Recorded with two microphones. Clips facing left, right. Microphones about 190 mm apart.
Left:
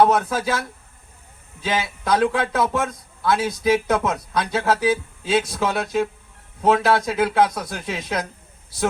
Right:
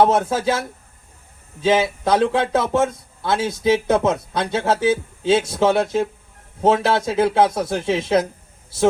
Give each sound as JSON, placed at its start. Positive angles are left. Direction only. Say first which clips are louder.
{"t": 0.0, "sound": "a man's voice", "louder": "right 1 dB", "side_deg": -25}
{"t": 1.6, "sound": "a man's voice", "louder": "right 7 dB", "side_deg": -25}